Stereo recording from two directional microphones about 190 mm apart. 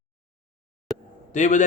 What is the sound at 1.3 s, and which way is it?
Speech, 40° left (ahead or behind).